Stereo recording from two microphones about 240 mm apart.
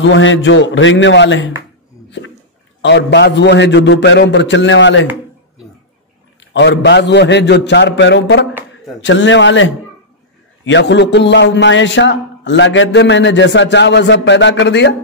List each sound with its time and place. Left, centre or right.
0.0 s speech: left
2.0 s a sound: left
2.8 s speech: left
6.5 s speech: left